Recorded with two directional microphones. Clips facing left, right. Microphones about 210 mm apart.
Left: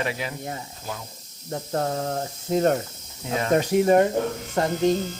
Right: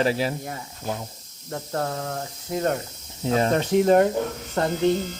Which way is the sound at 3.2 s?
35° right (ahead or behind).